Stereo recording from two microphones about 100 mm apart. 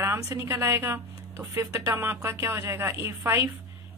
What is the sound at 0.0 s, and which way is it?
A woman's voice, 25° right (ahead or behind).